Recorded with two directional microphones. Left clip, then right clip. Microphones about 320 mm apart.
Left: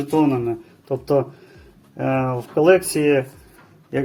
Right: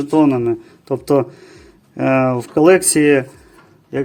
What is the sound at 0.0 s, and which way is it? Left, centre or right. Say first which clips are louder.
Speech: right 5 dB; right.